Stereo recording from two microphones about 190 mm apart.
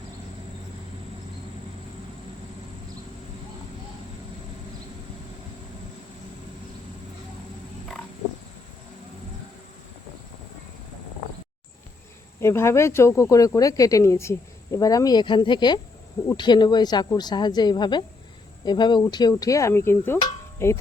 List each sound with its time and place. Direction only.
12.4 s a woman's voice: 15° left (ahead or behind)